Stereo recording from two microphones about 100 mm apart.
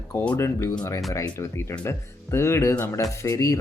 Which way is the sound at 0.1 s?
25° left (ahead or behind).